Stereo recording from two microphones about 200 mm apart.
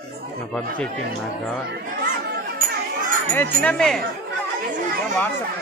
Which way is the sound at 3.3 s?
10° left (ahead or behind).